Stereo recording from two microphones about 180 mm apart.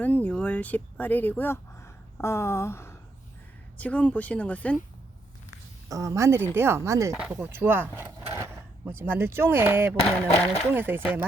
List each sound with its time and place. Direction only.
0.0 s speech: 10° left (ahead or behind)
5.9 s a woman's voice: 15° right (ahead or behind)
7.1 s a woman's voice: 5° right (ahead or behind)